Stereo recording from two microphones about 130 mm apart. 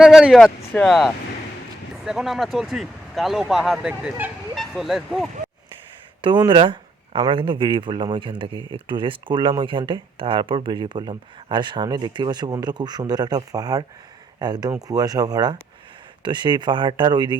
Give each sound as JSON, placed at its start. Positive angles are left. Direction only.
{"t": 0.0, "sound": "speech", "side_deg": -5}
{"t": 6.2, "sound": "speech", "side_deg": -35}